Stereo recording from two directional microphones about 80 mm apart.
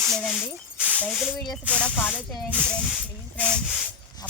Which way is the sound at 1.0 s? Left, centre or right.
Centre.